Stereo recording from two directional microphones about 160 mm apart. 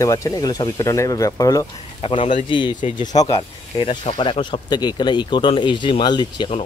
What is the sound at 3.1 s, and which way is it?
Speech, 40° left (ahead or behind).